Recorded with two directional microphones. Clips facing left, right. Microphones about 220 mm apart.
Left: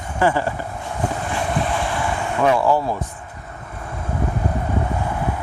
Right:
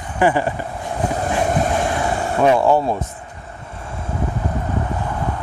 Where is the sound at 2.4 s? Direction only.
25° right (ahead or behind).